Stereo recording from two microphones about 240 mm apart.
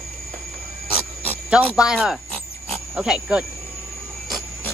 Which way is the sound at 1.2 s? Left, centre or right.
Centre.